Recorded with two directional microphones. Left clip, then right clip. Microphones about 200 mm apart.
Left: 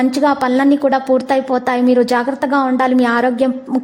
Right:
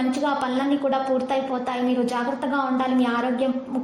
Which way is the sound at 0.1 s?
40° left (ahead or behind).